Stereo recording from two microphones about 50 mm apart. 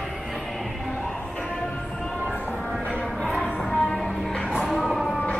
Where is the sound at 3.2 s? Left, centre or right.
Centre.